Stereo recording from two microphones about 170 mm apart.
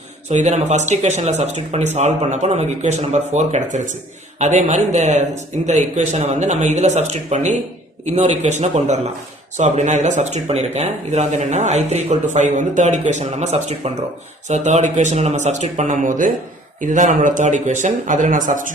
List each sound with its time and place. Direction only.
0.3 s speech: 40° right (ahead or behind)